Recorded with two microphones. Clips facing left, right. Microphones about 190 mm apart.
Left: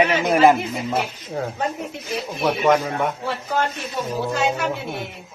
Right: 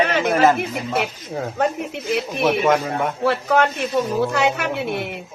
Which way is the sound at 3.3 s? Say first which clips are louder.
Right 6 dB; 70° right (ahead or behind).